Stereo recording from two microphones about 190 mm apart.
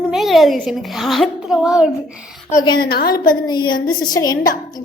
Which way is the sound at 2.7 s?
55° left (ahead or behind).